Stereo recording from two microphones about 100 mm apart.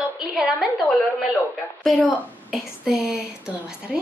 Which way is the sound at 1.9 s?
15° left (ahead or behind).